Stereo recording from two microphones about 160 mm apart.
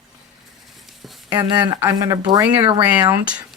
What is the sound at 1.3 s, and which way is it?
Speech, 25° right (ahead or behind).